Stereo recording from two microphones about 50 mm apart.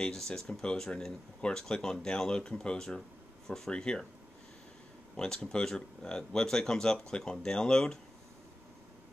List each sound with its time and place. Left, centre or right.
0.0 s speech: centre
5.1 s speech: centre